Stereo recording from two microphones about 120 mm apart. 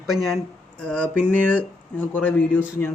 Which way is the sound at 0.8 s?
10° left (ahead or behind).